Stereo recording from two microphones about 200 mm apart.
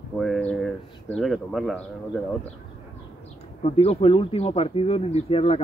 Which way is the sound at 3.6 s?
30° left (ahead or behind).